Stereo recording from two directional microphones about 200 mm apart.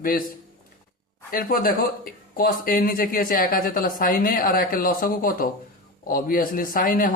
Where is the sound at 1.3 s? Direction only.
45° left (ahead or behind).